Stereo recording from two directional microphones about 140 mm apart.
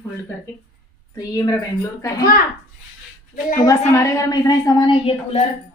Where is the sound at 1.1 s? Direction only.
25° left (ahead or behind).